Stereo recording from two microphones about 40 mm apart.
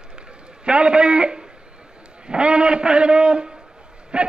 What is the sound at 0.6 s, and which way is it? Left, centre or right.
A man's voice, right.